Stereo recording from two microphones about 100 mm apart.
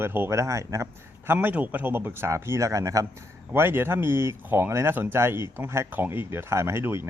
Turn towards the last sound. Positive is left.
turn(degrees=-25)  # may be behind; listen again after turning